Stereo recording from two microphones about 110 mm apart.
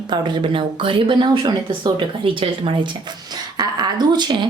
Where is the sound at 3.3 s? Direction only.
40° right (ahead or behind).